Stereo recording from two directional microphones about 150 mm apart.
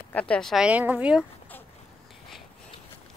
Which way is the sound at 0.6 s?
10° right (ahead or behind).